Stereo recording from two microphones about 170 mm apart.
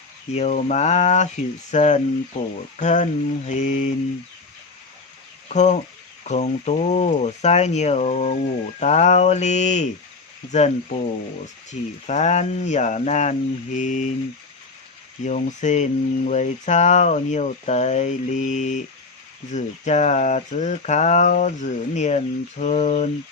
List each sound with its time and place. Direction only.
0.3 s speech: 40° left (ahead or behind)
5.5 s speech: 45° left (ahead or behind)
15.2 s speech: 45° left (ahead or behind)